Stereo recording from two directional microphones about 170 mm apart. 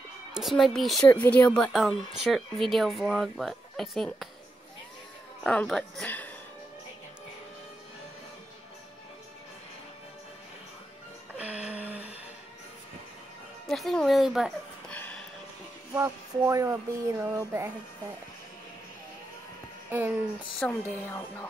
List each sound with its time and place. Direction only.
0.3 s a woman's voice: centre (ahead or behind)
5.4 s speech: 5° left (ahead or behind)
11.6 s a sound: 10° right (ahead or behind)
13.7 s a sound: centre (ahead or behind)
15.9 s speech: 15° right (ahead or behind)
19.9 s speech: 10° right (ahead or behind)
20.5 s speech: 10° left (ahead or behind)